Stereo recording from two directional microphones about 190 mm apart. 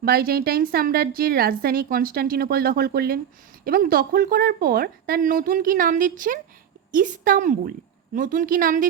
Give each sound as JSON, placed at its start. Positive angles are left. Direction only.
{"t": 0.0, "sound": "a woman's voice", "side_deg": -50}